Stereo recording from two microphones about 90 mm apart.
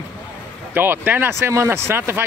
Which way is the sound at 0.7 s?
20° right (ahead or behind).